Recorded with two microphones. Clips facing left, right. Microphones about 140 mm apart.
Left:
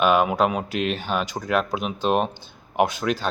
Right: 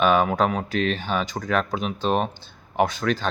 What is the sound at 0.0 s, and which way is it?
Speech, 10° left (ahead or behind).